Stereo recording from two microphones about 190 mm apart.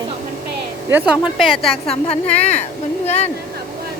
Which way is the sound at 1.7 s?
30° left (ahead or behind).